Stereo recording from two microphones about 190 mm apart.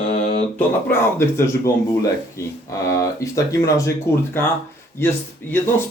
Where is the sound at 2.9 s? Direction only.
15° left (ahead or behind).